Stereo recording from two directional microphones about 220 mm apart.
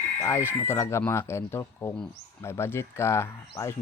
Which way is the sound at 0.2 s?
10° left (ahead or behind).